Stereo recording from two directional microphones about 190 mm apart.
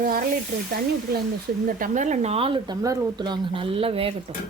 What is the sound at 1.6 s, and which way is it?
Speech, 45° right (ahead or behind).